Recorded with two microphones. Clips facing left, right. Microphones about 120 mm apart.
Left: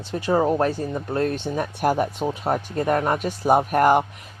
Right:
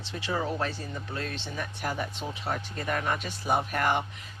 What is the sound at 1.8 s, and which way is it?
Speech, 75° left (ahead or behind).